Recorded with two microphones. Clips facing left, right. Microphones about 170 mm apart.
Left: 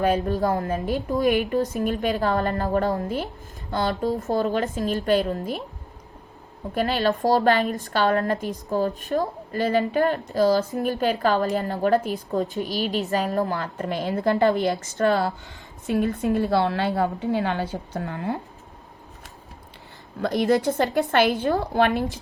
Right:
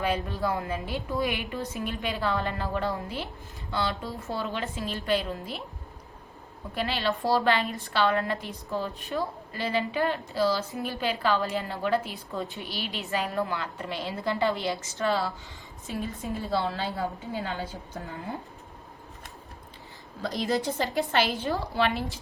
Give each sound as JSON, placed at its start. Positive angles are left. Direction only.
{"t": 0.0, "sound": "a woman's voice", "side_deg": 45}
{"t": 6.7, "sound": "a woman's voice", "side_deg": 45}
{"t": 20.2, "sound": "a woman's voice", "side_deg": 60}